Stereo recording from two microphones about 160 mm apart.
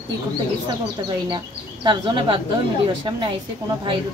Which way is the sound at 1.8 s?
30° right (ahead or behind).